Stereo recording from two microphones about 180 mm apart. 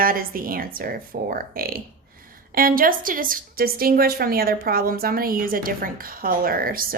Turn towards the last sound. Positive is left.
turn(degrees=-55)  # may be behind; listen again after turning